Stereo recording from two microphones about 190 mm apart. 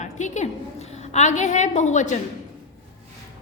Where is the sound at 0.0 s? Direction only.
40° left (ahead or behind).